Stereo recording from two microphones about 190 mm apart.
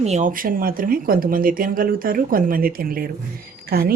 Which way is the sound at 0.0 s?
35° right (ahead or behind).